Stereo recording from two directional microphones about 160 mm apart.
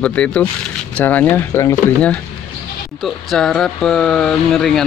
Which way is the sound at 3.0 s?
Centre (ahead or behind).